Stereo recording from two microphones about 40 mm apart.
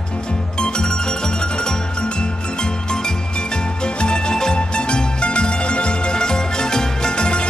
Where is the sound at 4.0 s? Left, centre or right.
Left.